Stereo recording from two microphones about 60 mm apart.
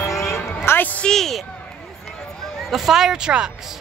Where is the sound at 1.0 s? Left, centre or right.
Centre.